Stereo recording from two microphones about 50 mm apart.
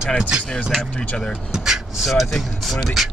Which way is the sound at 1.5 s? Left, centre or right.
Centre.